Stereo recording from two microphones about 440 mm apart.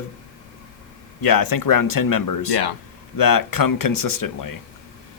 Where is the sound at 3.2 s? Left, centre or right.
Left.